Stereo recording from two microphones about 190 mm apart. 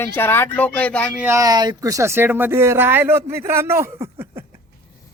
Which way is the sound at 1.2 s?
15° right (ahead or behind).